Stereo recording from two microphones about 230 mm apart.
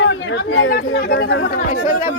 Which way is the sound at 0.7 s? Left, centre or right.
Left.